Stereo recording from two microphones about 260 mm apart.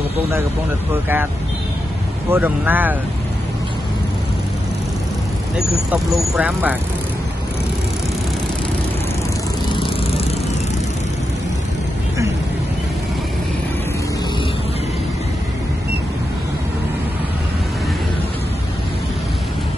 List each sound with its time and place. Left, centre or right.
2.3 s speech: centre
5.9 s speech: centre
9.8 s vehicle: centre